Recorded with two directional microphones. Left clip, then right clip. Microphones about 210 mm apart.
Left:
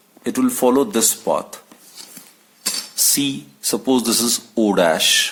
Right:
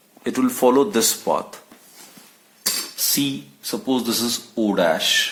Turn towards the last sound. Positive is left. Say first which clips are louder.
# left 3 dB
turn(degrees=45)  # may be behind; listen again after turning